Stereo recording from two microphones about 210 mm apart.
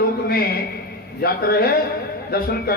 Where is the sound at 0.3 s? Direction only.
45° left (ahead or behind).